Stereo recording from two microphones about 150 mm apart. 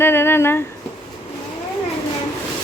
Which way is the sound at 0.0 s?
15° left (ahead or behind).